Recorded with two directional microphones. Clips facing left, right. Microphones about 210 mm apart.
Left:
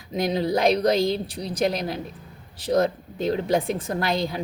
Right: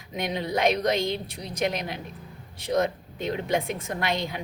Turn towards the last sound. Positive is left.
turn(degrees=35)  # may be behind; listen again after turning